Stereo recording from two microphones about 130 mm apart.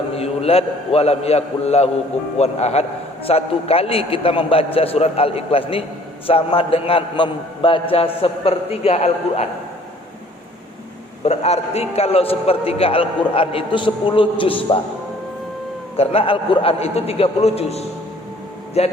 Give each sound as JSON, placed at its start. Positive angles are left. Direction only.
{"t": 0.2, "sound": "a man's voice", "side_deg": 50}
{"t": 11.2, "sound": "a man's voice", "side_deg": 55}
{"t": 16.0, "sound": "a man's voice", "side_deg": 45}